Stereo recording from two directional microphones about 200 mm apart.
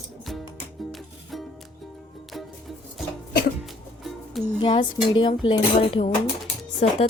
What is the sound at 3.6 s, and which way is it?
Music, centre (ahead or behind).